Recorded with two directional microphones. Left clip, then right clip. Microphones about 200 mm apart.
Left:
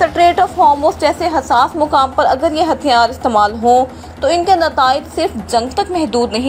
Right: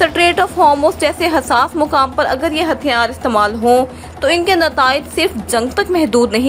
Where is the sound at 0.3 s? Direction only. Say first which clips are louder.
Left 1 dB; 25° right (ahead or behind).